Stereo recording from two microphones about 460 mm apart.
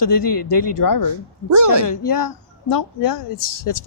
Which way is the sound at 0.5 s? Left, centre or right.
Left.